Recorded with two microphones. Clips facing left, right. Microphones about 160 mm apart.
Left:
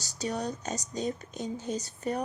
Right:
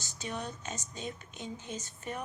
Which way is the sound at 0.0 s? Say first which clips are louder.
Left 6 dB; 40° left (ahead or behind).